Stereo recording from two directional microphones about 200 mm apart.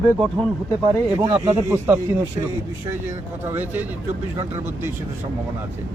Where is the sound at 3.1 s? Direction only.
15° right (ahead or behind).